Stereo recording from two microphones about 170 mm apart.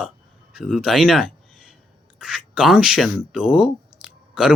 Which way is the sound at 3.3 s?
5° right (ahead or behind).